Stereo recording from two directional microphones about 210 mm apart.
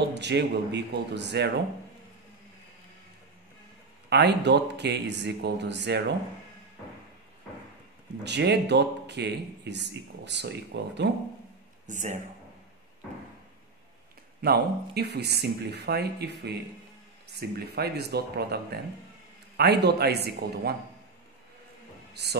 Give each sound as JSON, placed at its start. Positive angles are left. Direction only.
{"t": 0.1, "sound": "speech", "side_deg": -55}
{"t": 4.1, "sound": "speech", "side_deg": -55}
{"t": 8.2, "sound": "speech", "side_deg": -55}
{"t": 11.8, "sound": "speech", "side_deg": -35}
{"t": 14.4, "sound": "speech", "side_deg": -50}
{"t": 22.1, "sound": "music", "side_deg": -50}